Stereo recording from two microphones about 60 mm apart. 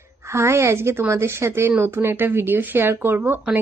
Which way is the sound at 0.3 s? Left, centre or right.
Right.